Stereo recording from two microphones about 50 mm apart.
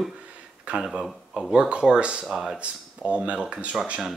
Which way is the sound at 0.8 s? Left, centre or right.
Centre.